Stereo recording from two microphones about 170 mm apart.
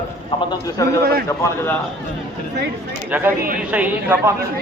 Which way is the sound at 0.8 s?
20° left (ahead or behind).